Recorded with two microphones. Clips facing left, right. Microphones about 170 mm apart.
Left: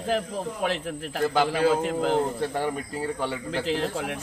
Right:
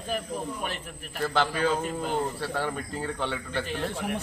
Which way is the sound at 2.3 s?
20° left (ahead or behind).